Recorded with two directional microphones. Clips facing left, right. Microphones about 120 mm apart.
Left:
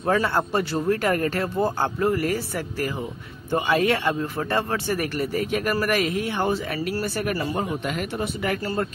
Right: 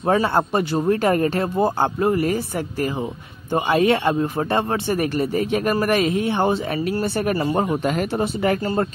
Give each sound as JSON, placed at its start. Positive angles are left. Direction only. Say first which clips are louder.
{"t": 0.0, "sound": "speech", "louder": "right 3 dB", "side_deg": -25}